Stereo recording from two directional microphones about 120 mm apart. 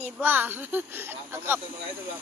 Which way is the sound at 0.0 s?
15° right (ahead or behind).